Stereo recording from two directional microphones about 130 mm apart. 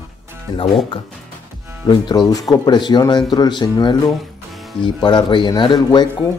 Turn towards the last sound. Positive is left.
turn(degrees=35)  # may be behind; listen again after turning